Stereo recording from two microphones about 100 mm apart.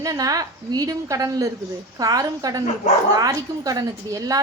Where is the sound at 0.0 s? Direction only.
35° right (ahead or behind).